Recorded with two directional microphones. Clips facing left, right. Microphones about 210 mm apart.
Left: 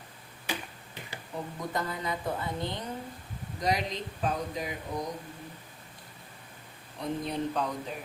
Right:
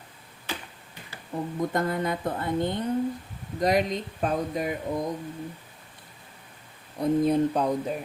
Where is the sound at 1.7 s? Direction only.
50° right (ahead or behind).